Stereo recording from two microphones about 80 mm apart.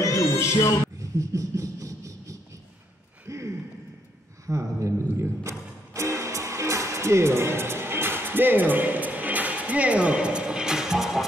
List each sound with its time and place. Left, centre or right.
0.0 s music: left
0.9 s a sound: right
4.5 s a man's voice: right
5.1 s music: right; by 11.2 s centre